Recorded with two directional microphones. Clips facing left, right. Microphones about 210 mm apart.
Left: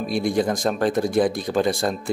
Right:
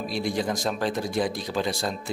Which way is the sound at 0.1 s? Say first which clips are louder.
Left 6 dB; 50° left (ahead or behind).